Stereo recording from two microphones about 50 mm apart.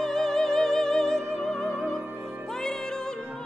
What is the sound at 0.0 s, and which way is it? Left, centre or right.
Music, centre.